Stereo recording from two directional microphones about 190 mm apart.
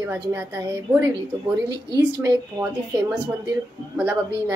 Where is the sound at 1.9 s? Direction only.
15° right (ahead or behind).